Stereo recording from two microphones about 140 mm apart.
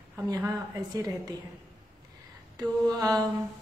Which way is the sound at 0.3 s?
25° right (ahead or behind).